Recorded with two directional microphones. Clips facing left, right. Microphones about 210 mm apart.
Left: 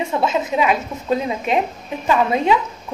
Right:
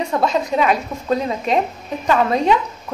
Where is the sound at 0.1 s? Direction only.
5° left (ahead or behind).